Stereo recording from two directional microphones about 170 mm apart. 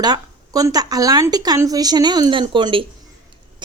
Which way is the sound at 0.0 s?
20° right (ahead or behind).